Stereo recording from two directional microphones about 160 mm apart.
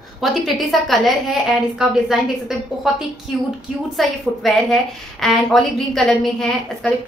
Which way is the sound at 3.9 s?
Centre (ahead or behind).